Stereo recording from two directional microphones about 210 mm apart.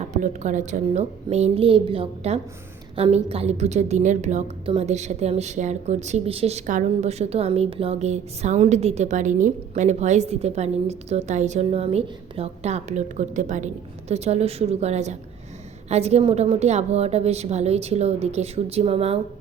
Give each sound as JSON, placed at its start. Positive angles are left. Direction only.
{"t": 0.1, "sound": "a woman's voice", "side_deg": -35}